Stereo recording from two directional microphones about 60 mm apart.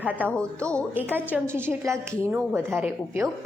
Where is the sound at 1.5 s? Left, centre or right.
Right.